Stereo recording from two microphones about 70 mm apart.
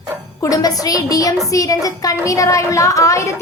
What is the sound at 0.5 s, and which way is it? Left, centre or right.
A child's voice, left.